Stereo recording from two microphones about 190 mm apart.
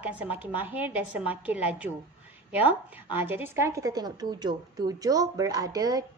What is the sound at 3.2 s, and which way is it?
A woman's voice, 10° right (ahead or behind).